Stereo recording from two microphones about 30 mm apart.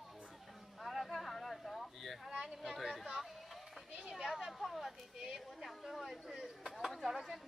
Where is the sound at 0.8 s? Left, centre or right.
Centre.